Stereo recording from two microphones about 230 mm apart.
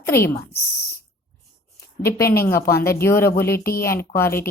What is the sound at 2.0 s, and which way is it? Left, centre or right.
Speech, centre.